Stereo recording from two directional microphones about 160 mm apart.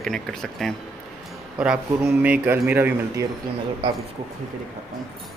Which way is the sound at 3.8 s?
30° right (ahead or behind).